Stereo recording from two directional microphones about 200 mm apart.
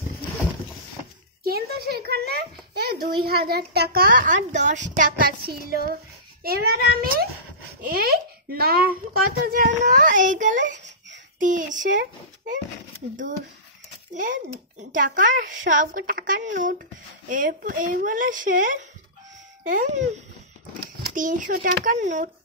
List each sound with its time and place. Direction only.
1.4 s a child's voice: 50° right (ahead or behind)
14.1 s a child's voice: 40° right (ahead or behind)
21.1 s a child's voice: 40° right (ahead or behind)